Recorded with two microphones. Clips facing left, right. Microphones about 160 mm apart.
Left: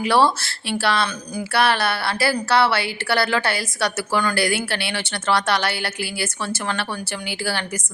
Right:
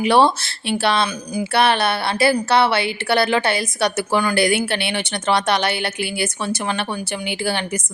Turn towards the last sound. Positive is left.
turn(degrees=-20)  # may be behind; listen again after turning